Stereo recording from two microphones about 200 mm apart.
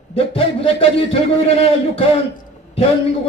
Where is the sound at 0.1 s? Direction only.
30° left (ahead or behind).